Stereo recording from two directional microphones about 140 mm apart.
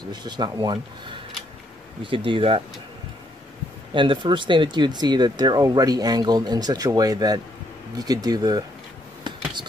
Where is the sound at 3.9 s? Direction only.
35° right (ahead or behind).